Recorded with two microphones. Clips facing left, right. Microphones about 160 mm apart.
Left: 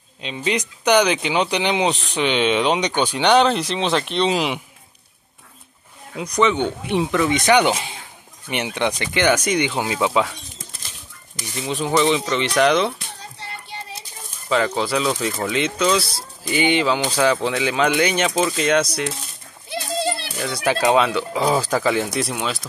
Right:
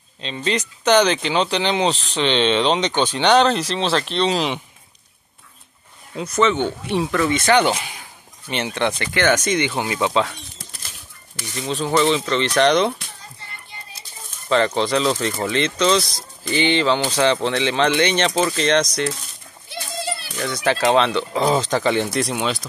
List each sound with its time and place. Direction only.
0.2 s speech: 10° left (ahead or behind)
6.1 s speech: 15° left (ahead or behind)
11.3 s speech: 10° left (ahead or behind)
13.2 s music: 75° left (ahead or behind)
14.5 s speech: 5° left (ahead or behind)
19.7 s children playing: 75° left (ahead or behind)
20.4 s speech: 10° left (ahead or behind)